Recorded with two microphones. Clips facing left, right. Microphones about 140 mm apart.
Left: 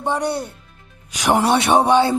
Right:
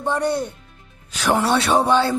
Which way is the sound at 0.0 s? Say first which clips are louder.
Right 1 dB; 10° left (ahead or behind).